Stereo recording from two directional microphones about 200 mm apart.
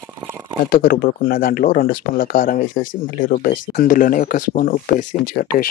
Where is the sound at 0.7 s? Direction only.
45° left (ahead or behind).